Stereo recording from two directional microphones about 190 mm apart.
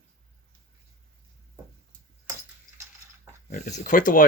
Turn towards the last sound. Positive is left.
turn(degrees=45)  # may be behind; listen again after turning